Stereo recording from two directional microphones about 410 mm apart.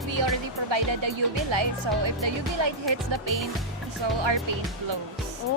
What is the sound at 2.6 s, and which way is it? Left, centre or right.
Speech, right.